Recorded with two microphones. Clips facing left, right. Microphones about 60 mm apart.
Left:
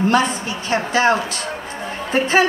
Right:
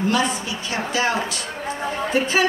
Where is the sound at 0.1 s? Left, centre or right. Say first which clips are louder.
Left 4 dB; left.